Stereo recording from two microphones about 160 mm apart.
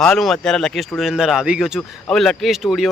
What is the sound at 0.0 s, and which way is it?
Speech, centre (ahead or behind).